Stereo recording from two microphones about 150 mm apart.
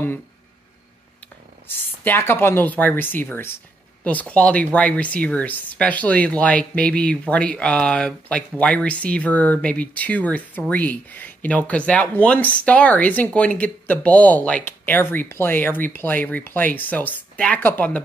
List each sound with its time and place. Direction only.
2.0 s speech: 15° left (ahead or behind)